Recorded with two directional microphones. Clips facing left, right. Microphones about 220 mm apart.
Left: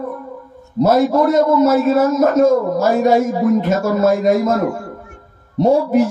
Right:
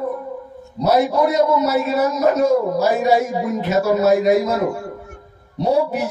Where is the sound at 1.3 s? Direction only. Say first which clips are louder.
Left 4 dB; 50° left (ahead or behind).